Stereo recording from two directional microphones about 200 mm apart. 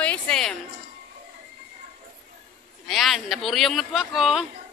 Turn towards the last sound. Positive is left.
turn(degrees=0)  # may be behind; listen again after turning